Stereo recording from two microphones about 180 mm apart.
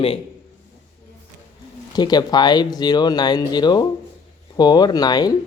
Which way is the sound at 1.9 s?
20° left (ahead or behind).